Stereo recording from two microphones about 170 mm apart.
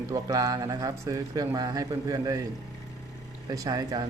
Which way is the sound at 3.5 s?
20° right (ahead or behind).